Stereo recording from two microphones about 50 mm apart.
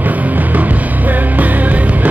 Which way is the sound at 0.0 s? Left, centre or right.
Right.